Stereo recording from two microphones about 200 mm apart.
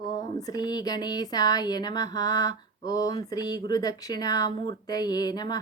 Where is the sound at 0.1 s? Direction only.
20° left (ahead or behind).